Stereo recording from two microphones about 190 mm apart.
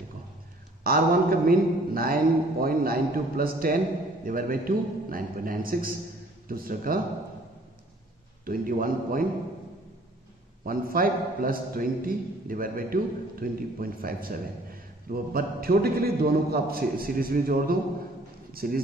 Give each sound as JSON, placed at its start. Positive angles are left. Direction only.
{"t": 0.8, "sound": "a man's voice", "side_deg": -50}
{"t": 8.5, "sound": "a man's voice", "side_deg": -45}
{"t": 10.6, "sound": "a man's voice", "side_deg": -50}